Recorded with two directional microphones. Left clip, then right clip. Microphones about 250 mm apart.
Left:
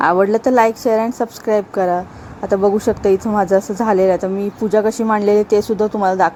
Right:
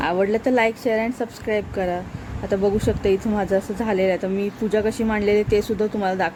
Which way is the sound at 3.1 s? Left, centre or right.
Centre.